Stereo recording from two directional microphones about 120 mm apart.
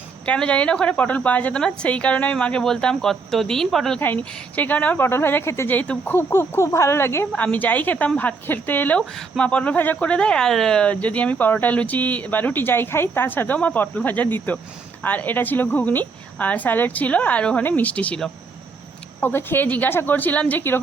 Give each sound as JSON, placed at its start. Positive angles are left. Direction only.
{"t": 0.3, "sound": "speech", "side_deg": 10}
{"t": 4.0, "sound": "speech", "side_deg": 15}